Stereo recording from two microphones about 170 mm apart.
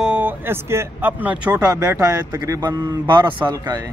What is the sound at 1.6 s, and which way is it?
A man's voice, 20° right (ahead or behind).